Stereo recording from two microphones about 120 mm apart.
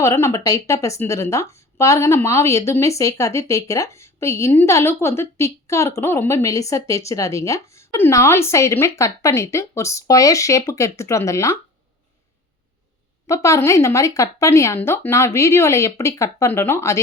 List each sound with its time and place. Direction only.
0.0 s speech: 20° left (ahead or behind)
13.2 s speech: 25° left (ahead or behind)